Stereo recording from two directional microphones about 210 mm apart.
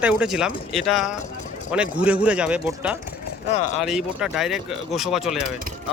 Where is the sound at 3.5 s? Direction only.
30° left (ahead or behind).